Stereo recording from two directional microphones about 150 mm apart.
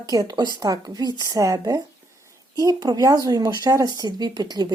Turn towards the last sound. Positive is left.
turn(degrees=-25)  # may be behind; listen again after turning